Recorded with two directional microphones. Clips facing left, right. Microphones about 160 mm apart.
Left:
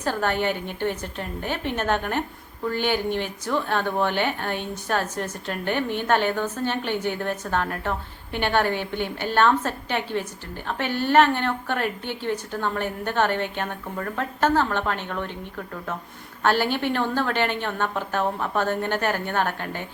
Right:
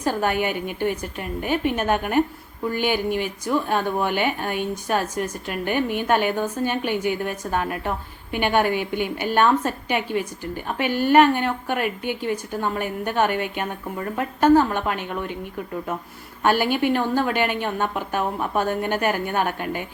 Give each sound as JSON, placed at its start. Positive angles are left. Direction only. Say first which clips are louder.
{"t": 0.0, "sound": "speech", "louder": "right 2 dB", "side_deg": -10}
{"t": 16.4, "sound": "speech", "louder": "right 2 dB", "side_deg": -10}